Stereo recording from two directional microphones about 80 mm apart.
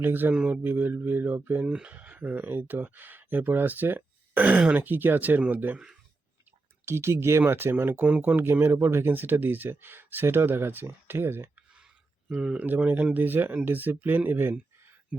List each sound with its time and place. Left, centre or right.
0.0 s speech: right
0.3 s speech: centre
0.6 s speech: right
6.8 s speech: right
8.0 s speech: centre
11.5 s a sound: centre
12.3 s speech: centre
12.6 s speech: right